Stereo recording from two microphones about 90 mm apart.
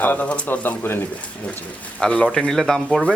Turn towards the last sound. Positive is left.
turn(degrees=5)  # may be behind; listen again after turning